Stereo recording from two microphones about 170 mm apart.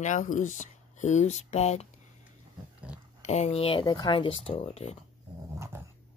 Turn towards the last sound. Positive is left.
turn(degrees=35)  # may be behind; listen again after turning